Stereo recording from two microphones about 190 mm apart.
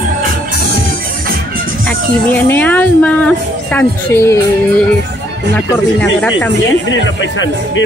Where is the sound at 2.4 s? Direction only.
10° left (ahead or behind).